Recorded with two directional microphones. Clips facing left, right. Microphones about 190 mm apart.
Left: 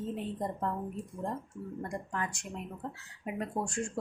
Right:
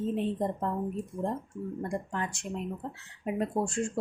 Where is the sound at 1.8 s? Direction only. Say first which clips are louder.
Right 2 dB; 30° right (ahead or behind).